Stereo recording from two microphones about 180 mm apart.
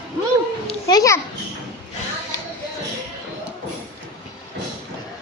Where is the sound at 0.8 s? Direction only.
20° left (ahead or behind).